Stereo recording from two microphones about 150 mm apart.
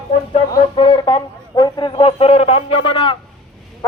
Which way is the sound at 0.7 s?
35° left (ahead or behind).